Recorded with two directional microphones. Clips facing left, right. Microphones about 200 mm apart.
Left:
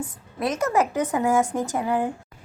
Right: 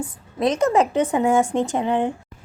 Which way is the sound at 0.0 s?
30° right (ahead or behind).